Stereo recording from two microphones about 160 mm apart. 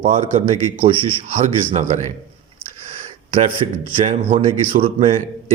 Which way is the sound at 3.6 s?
35° right (ahead or behind).